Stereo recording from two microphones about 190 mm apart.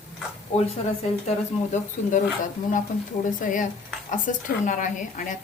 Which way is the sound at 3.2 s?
40° left (ahead or behind).